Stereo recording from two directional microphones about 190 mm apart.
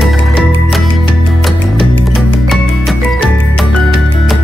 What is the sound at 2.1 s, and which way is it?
Music, centre (ahead or behind).